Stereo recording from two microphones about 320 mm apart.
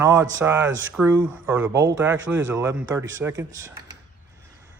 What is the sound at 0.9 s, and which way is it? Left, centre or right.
Speech, centre.